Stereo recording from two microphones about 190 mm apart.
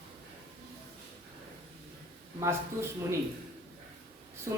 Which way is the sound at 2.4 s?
15° right (ahead or behind).